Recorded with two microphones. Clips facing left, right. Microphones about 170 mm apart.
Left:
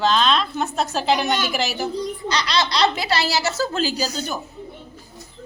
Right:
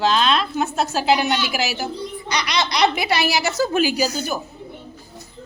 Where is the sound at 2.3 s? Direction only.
15° right (ahead or behind).